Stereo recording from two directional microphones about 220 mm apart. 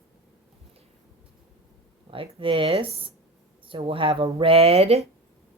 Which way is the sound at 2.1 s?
25° right (ahead or behind).